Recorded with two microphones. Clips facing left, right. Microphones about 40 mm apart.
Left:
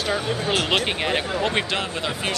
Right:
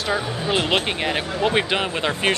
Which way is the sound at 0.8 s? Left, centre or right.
Centre.